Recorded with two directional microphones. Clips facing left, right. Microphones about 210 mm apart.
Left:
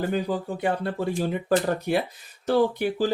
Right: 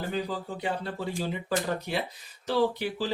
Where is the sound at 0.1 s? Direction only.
55° left (ahead or behind).